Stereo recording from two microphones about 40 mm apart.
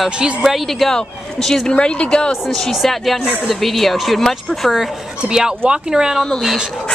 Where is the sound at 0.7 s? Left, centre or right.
Centre.